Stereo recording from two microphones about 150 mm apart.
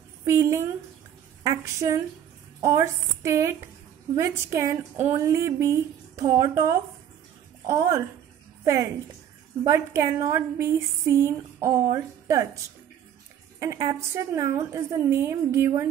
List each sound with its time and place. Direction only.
0.2 s a woman's voice: 20° right (ahead or behind)
9.6 s a woman's voice: 20° right (ahead or behind)
13.6 s a woman's voice: 20° right (ahead or behind)